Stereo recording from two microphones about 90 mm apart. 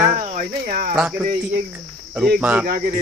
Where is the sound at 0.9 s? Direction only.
10° right (ahead or behind).